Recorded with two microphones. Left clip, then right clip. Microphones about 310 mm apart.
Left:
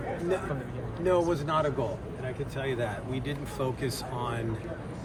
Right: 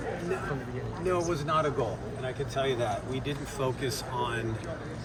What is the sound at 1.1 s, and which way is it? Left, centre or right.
A man's voice, centre.